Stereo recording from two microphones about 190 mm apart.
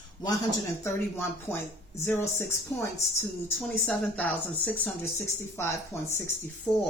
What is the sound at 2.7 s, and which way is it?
Speech, 15° left (ahead or behind).